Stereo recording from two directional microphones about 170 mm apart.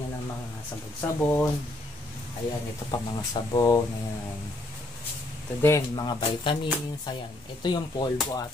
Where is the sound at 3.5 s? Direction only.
20° left (ahead or behind).